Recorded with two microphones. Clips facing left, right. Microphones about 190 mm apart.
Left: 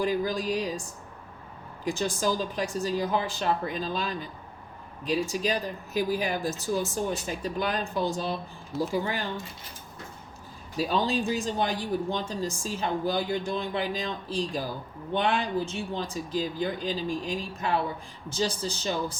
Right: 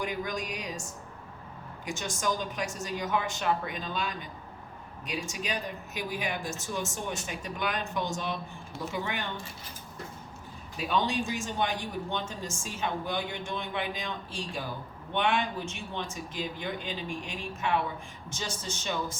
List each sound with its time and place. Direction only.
0.0 s speech: 30° left (ahead or behind)
10.8 s speech: 35° left (ahead or behind)